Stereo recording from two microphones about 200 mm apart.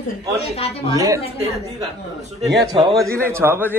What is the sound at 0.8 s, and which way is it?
Speech, 15° right (ahead or behind).